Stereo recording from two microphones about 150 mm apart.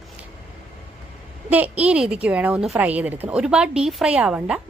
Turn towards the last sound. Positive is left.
turn(degrees=-5)  # may be behind; listen again after turning